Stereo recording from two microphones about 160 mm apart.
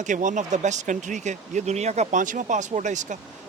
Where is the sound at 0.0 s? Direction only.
50° right (ahead or behind).